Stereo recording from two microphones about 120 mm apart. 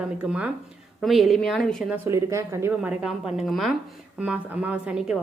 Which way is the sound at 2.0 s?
25° right (ahead or behind).